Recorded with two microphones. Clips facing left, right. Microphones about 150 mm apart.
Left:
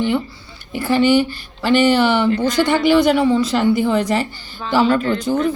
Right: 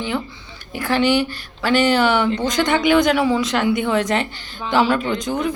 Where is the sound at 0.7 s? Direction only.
5° left (ahead or behind).